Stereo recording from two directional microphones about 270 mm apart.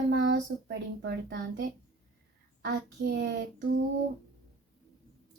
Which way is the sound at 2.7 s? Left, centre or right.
Right.